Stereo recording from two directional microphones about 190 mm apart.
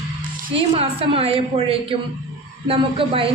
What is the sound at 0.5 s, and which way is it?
A woman's voice, 30° right (ahead or behind).